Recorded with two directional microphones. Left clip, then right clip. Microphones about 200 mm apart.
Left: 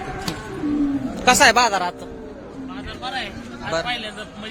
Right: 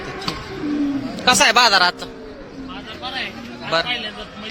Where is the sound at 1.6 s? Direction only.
5° left (ahead or behind).